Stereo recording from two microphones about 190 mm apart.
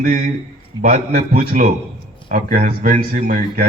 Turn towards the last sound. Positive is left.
turn(degrees=-50)  # may be behind; listen again after turning